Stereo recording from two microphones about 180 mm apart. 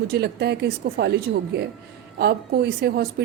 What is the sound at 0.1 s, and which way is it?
A woman's voice, 65° right (ahead or behind).